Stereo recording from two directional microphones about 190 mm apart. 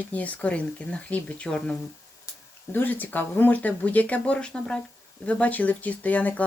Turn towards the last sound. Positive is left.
turn(degrees=10)  # may be behind; listen again after turning